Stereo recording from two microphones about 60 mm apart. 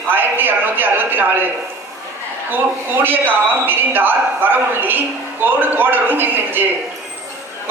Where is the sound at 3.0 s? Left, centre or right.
Right.